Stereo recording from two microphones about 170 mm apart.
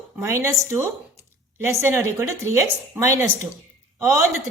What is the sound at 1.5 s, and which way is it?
A woman's voice, 15° right (ahead or behind).